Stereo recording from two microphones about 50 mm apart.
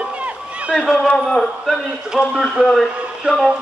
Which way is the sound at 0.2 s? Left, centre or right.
Right.